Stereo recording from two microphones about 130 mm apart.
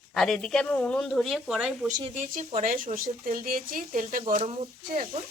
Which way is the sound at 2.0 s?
65° right (ahead or behind).